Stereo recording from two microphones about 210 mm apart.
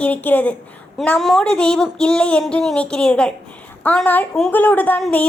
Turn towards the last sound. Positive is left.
turn(degrees=5)  # may be behind; listen again after turning